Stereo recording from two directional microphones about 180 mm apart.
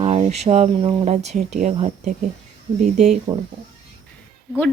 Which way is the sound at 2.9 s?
Centre (ahead or behind).